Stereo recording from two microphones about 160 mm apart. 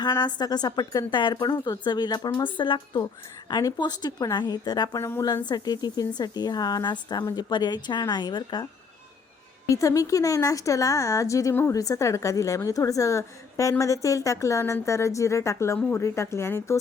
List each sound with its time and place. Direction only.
0.0 s speech: 25° left (ahead or behind)
9.6 s speech: 20° left (ahead or behind)